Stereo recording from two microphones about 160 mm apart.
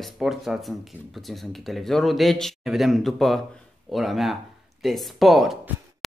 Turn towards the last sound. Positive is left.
turn(degrees=0)  # may be behind; listen again after turning